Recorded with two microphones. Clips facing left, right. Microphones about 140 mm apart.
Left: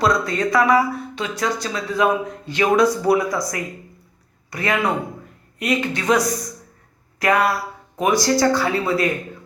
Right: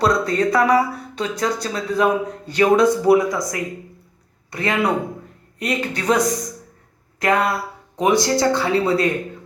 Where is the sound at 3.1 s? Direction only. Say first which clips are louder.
Right 3 dB; 15° right (ahead or behind); by 6.1 s 35° right (ahead or behind).